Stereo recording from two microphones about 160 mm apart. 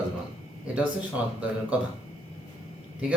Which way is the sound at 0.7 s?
10° right (ahead or behind).